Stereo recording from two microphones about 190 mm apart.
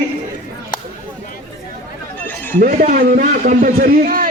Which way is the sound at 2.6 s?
45° right (ahead or behind).